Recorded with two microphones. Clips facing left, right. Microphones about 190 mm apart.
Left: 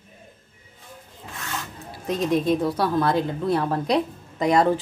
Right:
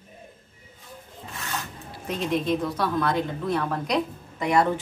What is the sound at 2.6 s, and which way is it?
A woman's voice, 30° left (ahead or behind).